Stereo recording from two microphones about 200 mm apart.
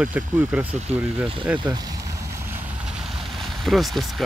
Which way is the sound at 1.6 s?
20° right (ahead or behind).